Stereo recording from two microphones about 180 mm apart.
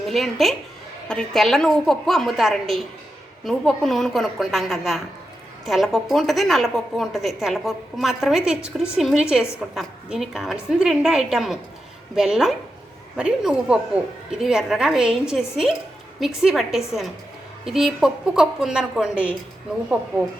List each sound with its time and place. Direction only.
0.1 s a woman's voice: centre (ahead or behind)